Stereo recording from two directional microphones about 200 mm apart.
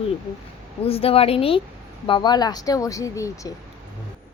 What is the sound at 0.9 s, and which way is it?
A woman's voice, 30° left (ahead or behind).